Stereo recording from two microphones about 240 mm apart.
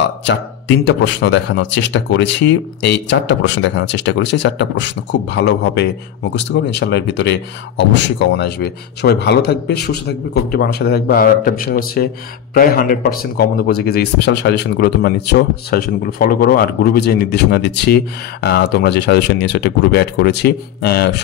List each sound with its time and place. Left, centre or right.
0.8 s a man's voice: left